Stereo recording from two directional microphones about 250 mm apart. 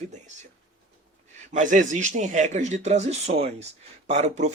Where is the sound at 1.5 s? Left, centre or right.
Right.